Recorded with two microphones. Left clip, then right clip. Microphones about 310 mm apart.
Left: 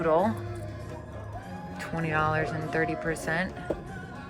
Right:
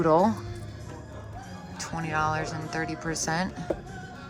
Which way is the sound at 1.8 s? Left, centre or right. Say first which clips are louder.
Even; centre.